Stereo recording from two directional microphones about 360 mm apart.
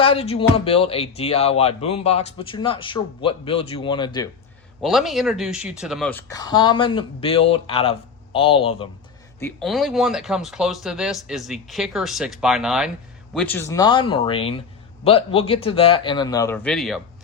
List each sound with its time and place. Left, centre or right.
0.0 s speech: centre
4.8 s speech: centre
9.4 s speech: centre